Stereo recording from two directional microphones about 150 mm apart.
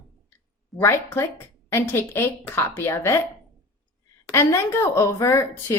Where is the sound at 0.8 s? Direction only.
15° left (ahead or behind).